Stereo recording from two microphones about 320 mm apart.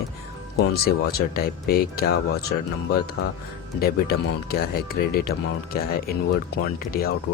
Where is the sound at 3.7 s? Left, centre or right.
Left.